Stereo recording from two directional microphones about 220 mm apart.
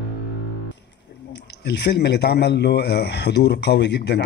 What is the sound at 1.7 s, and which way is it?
A man's voice, 50° left (ahead or behind).